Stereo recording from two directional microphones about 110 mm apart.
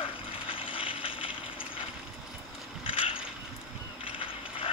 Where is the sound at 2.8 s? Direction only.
55° left (ahead or behind).